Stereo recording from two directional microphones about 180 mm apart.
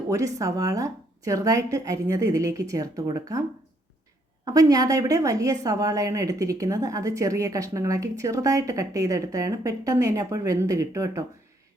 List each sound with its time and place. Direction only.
0.1 s speech: 20° right (ahead or behind)
4.4 s a woman's voice: 20° right (ahead or behind)